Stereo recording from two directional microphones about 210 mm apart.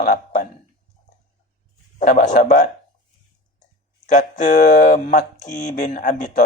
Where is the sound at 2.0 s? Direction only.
35° left (ahead or behind).